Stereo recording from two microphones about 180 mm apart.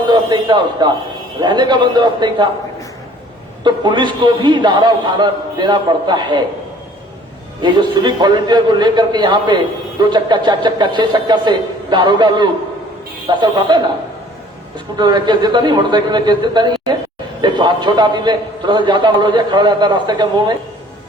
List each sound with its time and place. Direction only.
0.1 s a man's voice: 25° right (ahead or behind)
3.6 s a man's voice: 25° right (ahead or behind)
7.6 s a man's voice: 25° right (ahead or behind)
14.9 s a man's voice: 25° right (ahead or behind)